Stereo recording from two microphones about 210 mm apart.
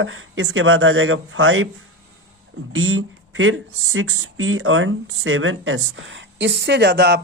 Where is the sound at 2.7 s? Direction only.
75° right (ahead or behind).